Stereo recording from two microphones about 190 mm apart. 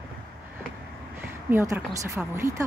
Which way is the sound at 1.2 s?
10° right (ahead or behind).